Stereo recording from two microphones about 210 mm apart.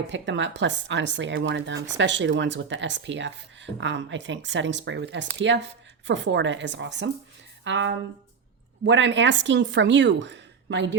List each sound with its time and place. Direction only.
0.1 s speech: 60° right (ahead or behind)